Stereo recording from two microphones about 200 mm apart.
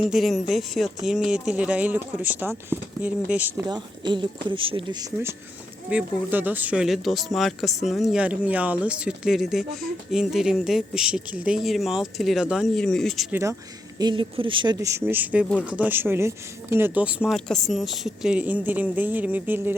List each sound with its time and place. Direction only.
0.0 s speech: centre (ahead or behind)
3.7 s speech: 20° right (ahead or behind)
5.9 s speech: 10° right (ahead or behind)
13.3 s speech: 15° right (ahead or behind)
14.0 s speech: 25° right (ahead or behind)